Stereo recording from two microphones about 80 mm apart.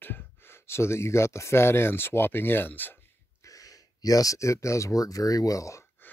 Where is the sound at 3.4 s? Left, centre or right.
Left.